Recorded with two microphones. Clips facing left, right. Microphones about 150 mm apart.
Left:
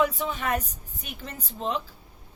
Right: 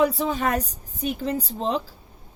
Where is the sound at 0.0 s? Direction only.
35° right (ahead or behind).